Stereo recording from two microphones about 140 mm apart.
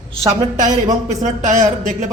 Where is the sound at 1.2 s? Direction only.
60° right (ahead or behind).